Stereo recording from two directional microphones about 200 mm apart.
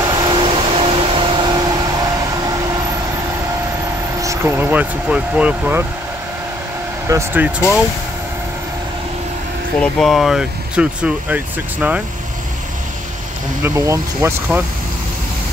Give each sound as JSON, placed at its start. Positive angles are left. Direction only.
{"t": 0.2, "sound": "vehicle", "side_deg": -20}
{"t": 4.2, "sound": "speech", "side_deg": -15}
{"t": 7.1, "sound": "speech", "side_deg": -10}
{"t": 9.9, "sound": "speech", "side_deg": 0}
{"t": 13.6, "sound": "speech", "side_deg": -15}